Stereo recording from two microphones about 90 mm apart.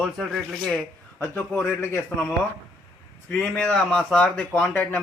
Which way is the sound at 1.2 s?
20° left (ahead or behind).